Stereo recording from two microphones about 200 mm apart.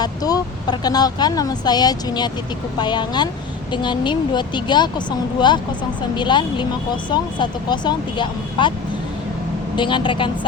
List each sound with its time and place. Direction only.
0.0 s speech: 20° left (ahead or behind)
9.7 s speech: 25° left (ahead or behind)